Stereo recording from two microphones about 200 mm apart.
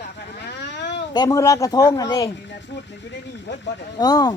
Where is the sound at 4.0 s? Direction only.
20° left (ahead or behind).